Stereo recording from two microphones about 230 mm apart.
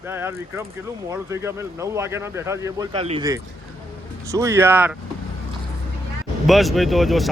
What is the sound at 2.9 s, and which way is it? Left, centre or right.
Speech, right.